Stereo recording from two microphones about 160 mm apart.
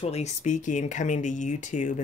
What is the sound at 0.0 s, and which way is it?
Speech, 45° left (ahead or behind).